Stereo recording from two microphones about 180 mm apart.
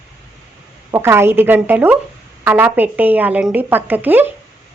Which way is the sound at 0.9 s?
15° right (ahead or behind).